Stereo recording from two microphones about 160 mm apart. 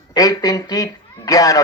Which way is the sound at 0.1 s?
25° left (ahead or behind).